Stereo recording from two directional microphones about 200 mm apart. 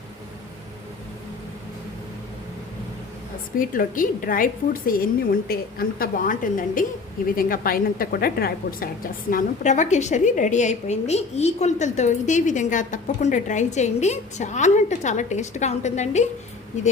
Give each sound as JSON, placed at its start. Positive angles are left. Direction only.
{"t": 3.6, "sound": "a woman's voice", "side_deg": 45}
{"t": 9.3, "sound": "a woman's voice", "side_deg": 40}